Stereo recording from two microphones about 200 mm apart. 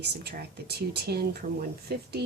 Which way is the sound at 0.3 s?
50° right (ahead or behind).